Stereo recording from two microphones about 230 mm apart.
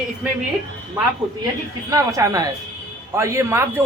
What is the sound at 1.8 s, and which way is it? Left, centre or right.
Speech, centre.